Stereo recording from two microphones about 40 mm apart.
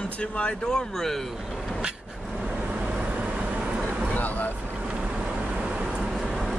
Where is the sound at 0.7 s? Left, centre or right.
Centre.